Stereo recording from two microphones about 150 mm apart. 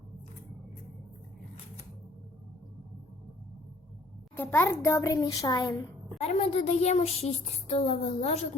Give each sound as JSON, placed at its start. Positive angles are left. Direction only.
{"t": 4.4, "sound": "a child's voice", "side_deg": 15}
{"t": 6.1, "sound": "a woman's voice", "side_deg": 45}